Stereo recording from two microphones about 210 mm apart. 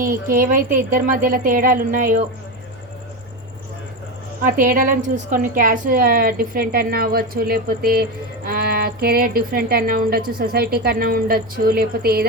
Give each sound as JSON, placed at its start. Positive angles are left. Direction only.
{"t": 0.0, "sound": "a woman's voice", "side_deg": -40}
{"t": 4.4, "sound": "speech", "side_deg": -40}